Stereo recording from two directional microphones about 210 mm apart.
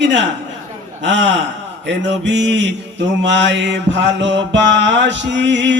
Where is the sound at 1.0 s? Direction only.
60° right (ahead or behind).